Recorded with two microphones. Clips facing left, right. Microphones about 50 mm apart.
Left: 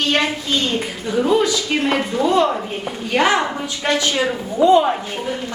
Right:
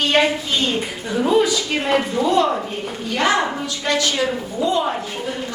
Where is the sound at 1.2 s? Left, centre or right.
Centre.